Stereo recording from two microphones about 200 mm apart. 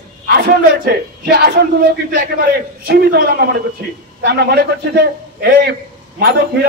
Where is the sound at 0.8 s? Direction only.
50° right (ahead or behind).